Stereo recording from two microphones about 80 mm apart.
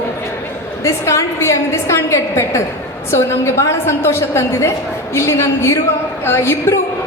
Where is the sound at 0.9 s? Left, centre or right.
Left.